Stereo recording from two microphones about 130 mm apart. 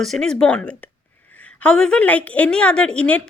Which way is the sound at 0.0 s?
5° left (ahead or behind).